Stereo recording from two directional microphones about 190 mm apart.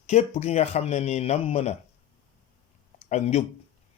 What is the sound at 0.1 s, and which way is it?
Speech, 35° left (ahead or behind).